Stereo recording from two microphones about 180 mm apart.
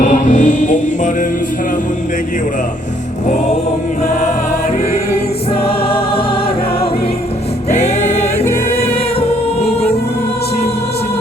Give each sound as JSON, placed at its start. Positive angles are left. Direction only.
{"t": 0.0, "sound": "music", "side_deg": 45}
{"t": 5.5, "sound": "music", "side_deg": 30}
{"t": 7.7, "sound": "music", "side_deg": 40}
{"t": 9.6, "sound": "music", "side_deg": 35}